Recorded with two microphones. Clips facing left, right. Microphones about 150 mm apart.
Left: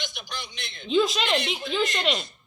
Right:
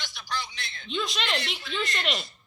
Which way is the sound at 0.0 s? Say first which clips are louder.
Right 2 dB; 20° left (ahead or behind).